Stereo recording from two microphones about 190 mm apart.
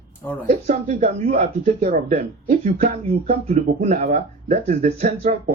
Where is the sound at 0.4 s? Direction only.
40° right (ahead or behind).